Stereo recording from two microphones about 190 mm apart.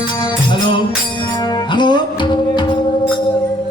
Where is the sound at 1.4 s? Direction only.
25° left (ahead or behind).